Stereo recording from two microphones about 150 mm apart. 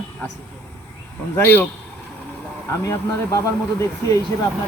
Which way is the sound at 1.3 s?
10° left (ahead or behind).